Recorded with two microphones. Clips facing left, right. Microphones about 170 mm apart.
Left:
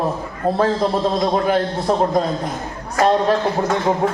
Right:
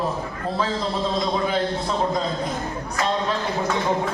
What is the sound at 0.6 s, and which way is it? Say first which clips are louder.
A man's voice: left 6 dB; 55° left (ahead or behind).